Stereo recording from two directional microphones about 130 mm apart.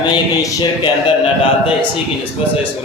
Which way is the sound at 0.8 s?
45° left (ahead or behind).